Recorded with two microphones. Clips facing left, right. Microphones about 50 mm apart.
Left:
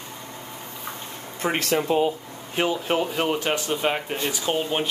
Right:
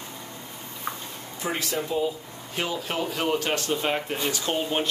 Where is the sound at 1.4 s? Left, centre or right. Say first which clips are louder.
Left 5 dB; left.